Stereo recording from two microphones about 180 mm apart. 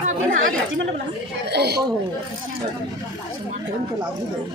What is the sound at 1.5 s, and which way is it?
Speech, 65° right (ahead or behind).